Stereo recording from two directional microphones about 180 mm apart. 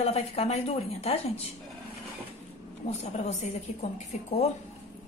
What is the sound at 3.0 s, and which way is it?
A woman's voice, 35° left (ahead or behind).